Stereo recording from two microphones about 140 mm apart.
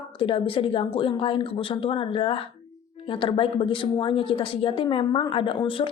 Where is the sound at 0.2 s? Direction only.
40° left (ahead or behind).